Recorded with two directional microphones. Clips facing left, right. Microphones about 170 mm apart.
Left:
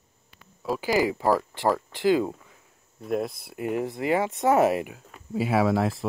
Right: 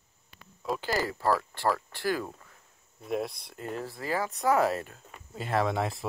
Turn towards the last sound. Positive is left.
turn(degrees=0)  # may be behind; listen again after turning